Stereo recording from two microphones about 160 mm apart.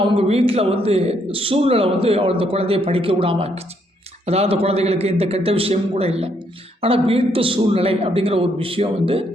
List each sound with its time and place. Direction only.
0.0 s a man's voice: 35° right (ahead or behind)